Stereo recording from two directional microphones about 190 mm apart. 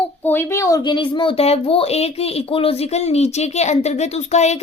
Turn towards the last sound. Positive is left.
turn(degrees=35)  # may be behind; listen again after turning